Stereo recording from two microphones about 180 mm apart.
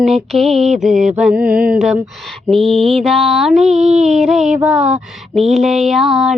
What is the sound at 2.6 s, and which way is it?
Mantra, 30° right (ahead or behind).